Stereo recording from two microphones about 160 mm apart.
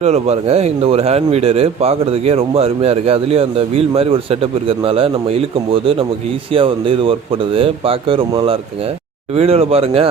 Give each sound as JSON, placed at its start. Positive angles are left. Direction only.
{"t": 0.0, "sound": "speech", "side_deg": -40}